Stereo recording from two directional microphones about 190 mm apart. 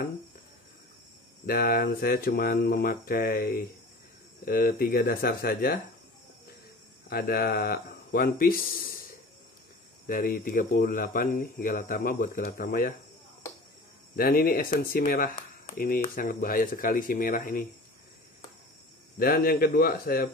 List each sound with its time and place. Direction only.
1.4 s speech: 50° left (ahead or behind)
7.1 s speech: 55° left (ahead or behind)
10.0 s speech: 50° left (ahead or behind)
14.1 s speech: 50° left (ahead or behind)
19.1 s speech: 50° left (ahead or behind)